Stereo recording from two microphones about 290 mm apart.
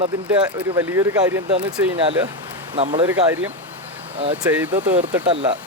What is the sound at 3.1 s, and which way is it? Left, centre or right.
Speech, centre.